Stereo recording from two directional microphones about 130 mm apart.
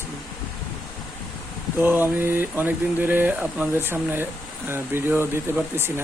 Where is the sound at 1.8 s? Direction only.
15° right (ahead or behind).